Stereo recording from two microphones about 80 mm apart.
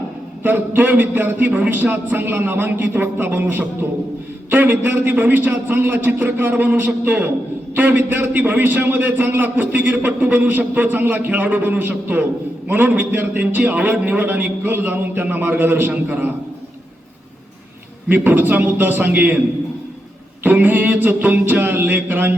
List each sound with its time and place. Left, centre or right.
0.4 s a man's voice: right
18.1 s a man's voice: right
20.4 s a man's voice: right